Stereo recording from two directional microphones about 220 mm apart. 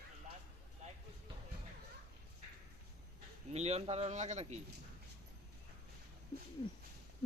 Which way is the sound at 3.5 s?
30° right (ahead or behind).